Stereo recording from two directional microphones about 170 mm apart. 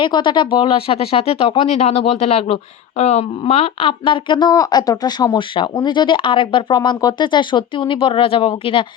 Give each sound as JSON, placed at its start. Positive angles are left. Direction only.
{"t": 0.0, "sound": "speech", "side_deg": 25}